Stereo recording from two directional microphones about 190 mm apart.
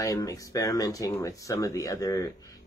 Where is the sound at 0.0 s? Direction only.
20° left (ahead or behind).